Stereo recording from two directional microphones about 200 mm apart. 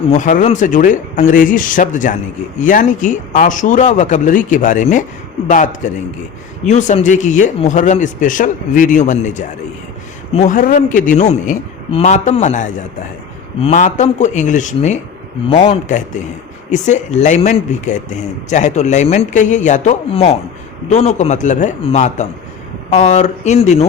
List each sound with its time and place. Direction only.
0.1 s speech: 40° left (ahead or behind)